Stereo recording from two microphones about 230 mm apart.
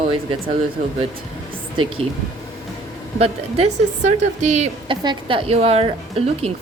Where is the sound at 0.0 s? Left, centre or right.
Right.